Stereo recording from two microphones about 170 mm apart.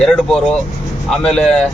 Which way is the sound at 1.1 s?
Centre (ahead or behind).